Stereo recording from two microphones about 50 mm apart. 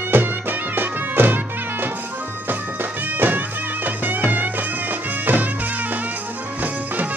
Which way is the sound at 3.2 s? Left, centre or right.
Right.